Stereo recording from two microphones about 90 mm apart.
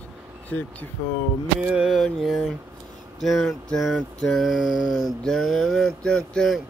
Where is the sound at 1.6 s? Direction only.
10° right (ahead or behind).